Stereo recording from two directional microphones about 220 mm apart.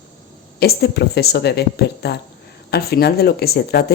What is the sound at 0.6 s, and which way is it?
Speech, 45° left (ahead or behind).